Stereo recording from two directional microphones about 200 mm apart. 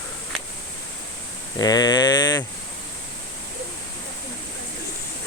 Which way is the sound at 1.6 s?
20° left (ahead or behind).